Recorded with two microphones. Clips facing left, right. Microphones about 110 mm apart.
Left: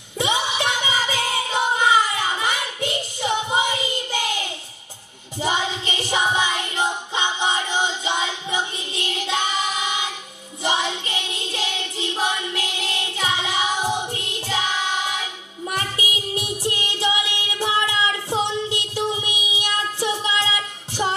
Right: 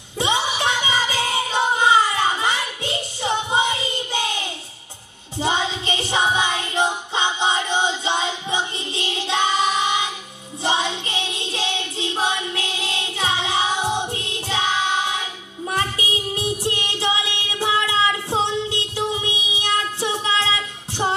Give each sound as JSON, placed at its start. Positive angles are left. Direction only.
{"t": 0.2, "sound": "music", "side_deg": -30}
{"t": 5.4, "sound": "music", "side_deg": -25}
{"t": 10.6, "sound": "child singing", "side_deg": -25}
{"t": 15.8, "sound": "music", "side_deg": -30}
{"t": 17.9, "sound": "child singing", "side_deg": -25}
{"t": 20.1, "sound": "music", "side_deg": -25}